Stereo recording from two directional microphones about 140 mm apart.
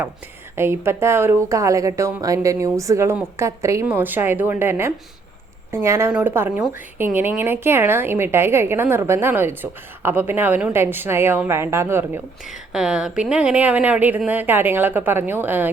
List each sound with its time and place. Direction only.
0.5 s a woman's voice: 20° right (ahead or behind)
12.7 s a woman's voice: 5° right (ahead or behind)